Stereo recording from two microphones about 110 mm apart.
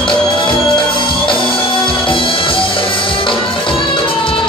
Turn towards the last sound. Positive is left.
turn(degrees=50)  # may be behind; listen again after turning